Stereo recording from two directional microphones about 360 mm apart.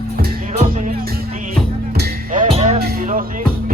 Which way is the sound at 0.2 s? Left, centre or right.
Right.